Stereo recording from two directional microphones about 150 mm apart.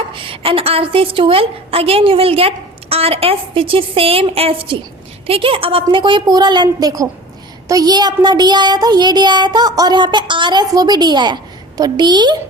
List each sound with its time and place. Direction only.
0.1 s a woman's voice: 35° right (ahead or behind)
7.7 s child singing: 25° right (ahead or behind)